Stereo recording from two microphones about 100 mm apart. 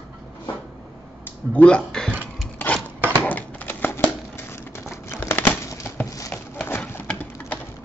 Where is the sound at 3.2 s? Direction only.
15° left (ahead or behind).